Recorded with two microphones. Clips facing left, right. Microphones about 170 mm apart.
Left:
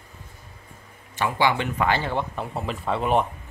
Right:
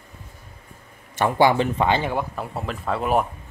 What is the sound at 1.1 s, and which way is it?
Speech, 45° right (ahead or behind).